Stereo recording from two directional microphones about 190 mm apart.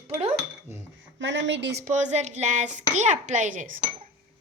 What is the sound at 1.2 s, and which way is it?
Speech, 70° right (ahead or behind).